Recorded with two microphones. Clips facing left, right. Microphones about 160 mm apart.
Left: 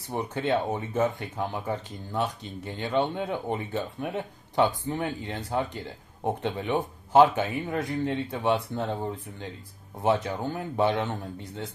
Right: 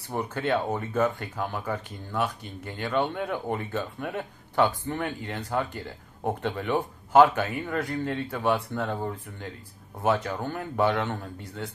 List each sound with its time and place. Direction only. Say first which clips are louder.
0.1 s speech: even; 20° left (ahead or behind)